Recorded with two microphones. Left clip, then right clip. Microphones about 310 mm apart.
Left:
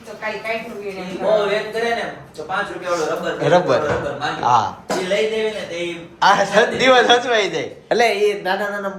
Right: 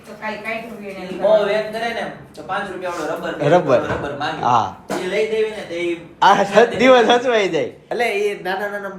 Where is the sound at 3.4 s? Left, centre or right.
Centre.